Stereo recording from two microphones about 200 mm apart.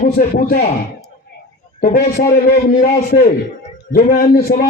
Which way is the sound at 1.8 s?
45° left (ahead or behind).